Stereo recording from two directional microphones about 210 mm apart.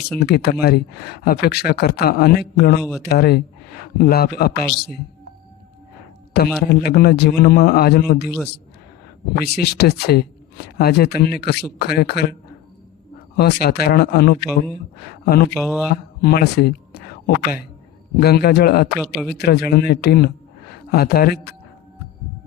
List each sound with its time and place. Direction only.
0.2 s speech: 50° left (ahead or behind)
4.5 s a man's voice: centre (ahead or behind)
6.3 s speech: 45° left (ahead or behind)
9.4 s speech: 50° left (ahead or behind)
13.3 s speech: 50° left (ahead or behind)
15.6 s a man's voice: 5° right (ahead or behind)
15.9 s speech: 50° left (ahead or behind)
18.9 s a man's voice: centre (ahead or behind)
19.3 s speech: 50° left (ahead or behind)